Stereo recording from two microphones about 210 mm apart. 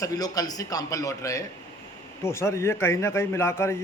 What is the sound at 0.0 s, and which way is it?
A man's voice, 15° left (ahead or behind).